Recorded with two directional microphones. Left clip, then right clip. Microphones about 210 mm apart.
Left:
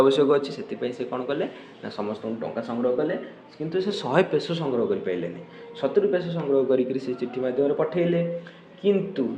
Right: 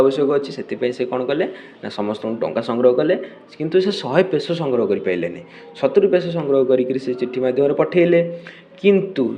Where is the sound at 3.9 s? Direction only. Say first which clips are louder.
Right 5 dB; 15° right (ahead or behind).